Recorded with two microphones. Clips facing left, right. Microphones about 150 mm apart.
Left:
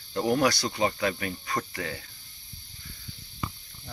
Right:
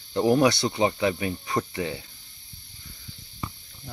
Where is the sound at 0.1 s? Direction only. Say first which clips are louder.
Right 4 dB; 20° right (ahead or behind).